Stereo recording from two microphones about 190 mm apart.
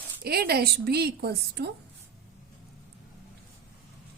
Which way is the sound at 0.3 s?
55° right (ahead or behind).